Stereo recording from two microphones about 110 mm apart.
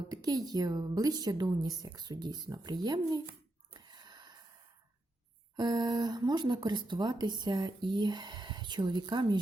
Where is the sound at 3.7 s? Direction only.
40° right (ahead or behind).